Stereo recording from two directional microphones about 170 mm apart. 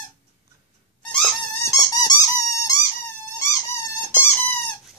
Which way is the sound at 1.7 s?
20° left (ahead or behind).